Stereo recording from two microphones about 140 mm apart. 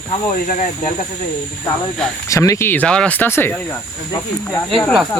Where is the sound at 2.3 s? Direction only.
20° left (ahead or behind).